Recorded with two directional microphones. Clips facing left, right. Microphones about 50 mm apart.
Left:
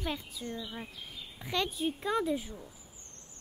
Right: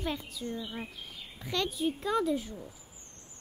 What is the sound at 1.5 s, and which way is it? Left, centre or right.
Speech, centre.